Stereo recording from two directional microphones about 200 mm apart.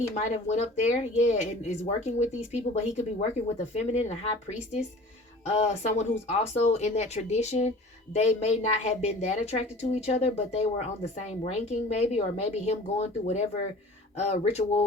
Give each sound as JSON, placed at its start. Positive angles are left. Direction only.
{"t": 0.2, "sound": "a woman's voice", "side_deg": 35}
{"t": 5.5, "sound": "a woman's voice", "side_deg": 35}